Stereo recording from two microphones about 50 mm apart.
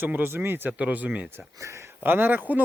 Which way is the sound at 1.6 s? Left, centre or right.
Right.